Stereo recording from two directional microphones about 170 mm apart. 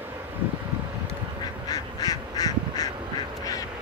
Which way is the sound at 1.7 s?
20° left (ahead or behind).